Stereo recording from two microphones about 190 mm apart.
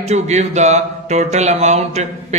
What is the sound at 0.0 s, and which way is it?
Speech, 35° right (ahead or behind).